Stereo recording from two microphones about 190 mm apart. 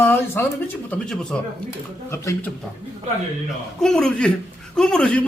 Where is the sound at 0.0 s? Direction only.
10° left (ahead or behind).